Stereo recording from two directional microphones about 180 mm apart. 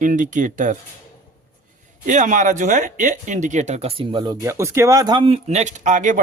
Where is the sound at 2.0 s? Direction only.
45° right (ahead or behind).